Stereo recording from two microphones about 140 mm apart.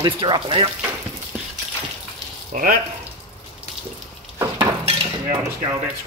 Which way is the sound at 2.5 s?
75° right (ahead or behind).